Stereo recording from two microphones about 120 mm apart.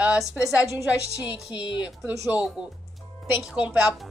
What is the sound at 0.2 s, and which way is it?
A woman's voice, 5° right (ahead or behind).